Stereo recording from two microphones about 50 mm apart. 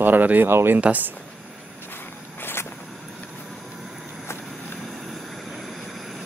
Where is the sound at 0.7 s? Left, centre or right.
Right.